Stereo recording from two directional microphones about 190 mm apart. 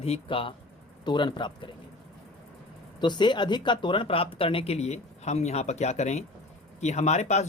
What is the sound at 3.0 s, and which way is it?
Speech, 25° left (ahead or behind).